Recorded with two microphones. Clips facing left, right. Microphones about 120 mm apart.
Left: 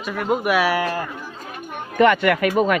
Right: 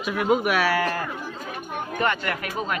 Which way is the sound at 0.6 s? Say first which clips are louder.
Left 2 dB; 15° left (ahead or behind).